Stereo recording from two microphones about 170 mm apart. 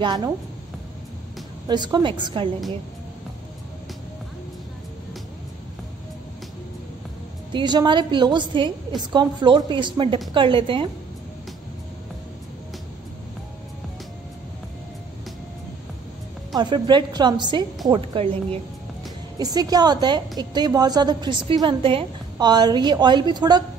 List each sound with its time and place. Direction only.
0.0 s a woman's voice: 20° right (ahead or behind)
1.7 s a woman's voice: 25° right (ahead or behind)
7.5 s a woman's voice: 25° right (ahead or behind)
16.5 s a woman's voice: 25° right (ahead or behind)
19.3 s a woman's voice: 20° right (ahead or behind)